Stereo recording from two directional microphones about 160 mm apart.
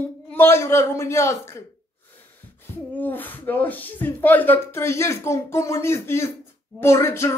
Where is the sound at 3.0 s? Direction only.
10° left (ahead or behind).